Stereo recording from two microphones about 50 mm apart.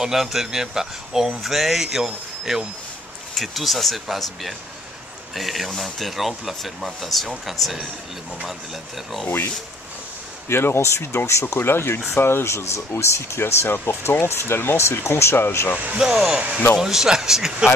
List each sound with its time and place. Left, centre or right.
0.0 s a man's voice: centre
10.5 s speech: left
11.5 s speech: left
16.0 s a man's voice: centre
16.3 s speech: right
16.7 s a man's voice: centre